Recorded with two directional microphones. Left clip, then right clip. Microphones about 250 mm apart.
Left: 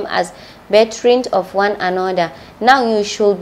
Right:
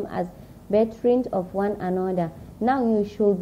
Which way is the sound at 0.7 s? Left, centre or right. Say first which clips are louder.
Left 9 dB; centre.